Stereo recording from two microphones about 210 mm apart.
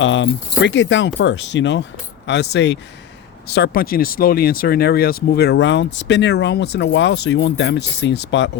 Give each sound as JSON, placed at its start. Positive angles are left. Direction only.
{"t": 0.0, "sound": "speech", "side_deg": 60}